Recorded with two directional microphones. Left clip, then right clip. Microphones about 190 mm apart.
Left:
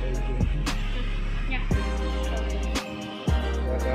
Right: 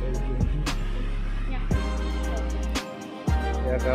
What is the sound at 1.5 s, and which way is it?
Music, centre (ahead or behind).